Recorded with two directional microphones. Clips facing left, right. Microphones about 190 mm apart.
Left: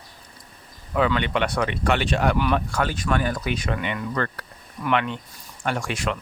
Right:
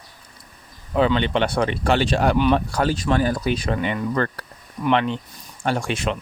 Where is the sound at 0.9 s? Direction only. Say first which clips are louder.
Right 3 dB; 30° right (ahead or behind).